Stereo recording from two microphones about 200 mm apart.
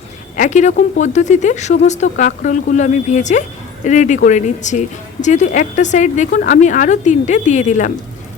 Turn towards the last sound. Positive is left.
turn(degrees=40)  # may be behind; listen again after turning